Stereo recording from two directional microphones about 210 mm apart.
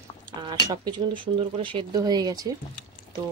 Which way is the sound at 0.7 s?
25° right (ahead or behind).